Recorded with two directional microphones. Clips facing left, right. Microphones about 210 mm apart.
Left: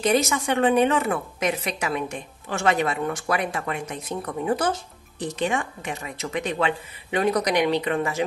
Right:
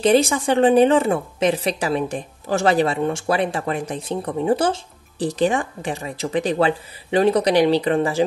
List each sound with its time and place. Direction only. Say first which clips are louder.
0.0 s a woman's voice: right 5 dB; 30° right (ahead or behind)